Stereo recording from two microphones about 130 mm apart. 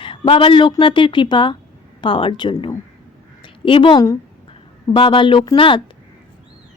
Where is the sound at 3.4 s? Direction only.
40° left (ahead or behind).